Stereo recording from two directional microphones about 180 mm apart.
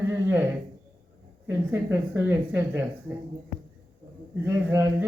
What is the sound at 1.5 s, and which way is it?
Speech, 15° right (ahead or behind).